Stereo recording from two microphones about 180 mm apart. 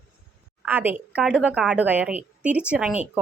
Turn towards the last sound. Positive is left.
turn(degrees=-5)  # may be behind; listen again after turning